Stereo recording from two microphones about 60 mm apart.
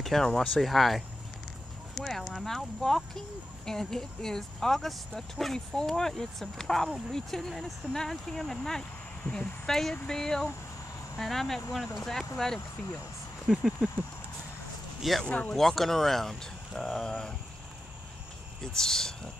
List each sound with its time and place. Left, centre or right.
0.0 s speech: centre
9.2 s a woman's voice: centre
9.7 s speech: centre
13.5 s speech: centre
15.0 s speech: centre
15.2 s speech: centre
15.5 s speech: centre
18.6 s speech: centre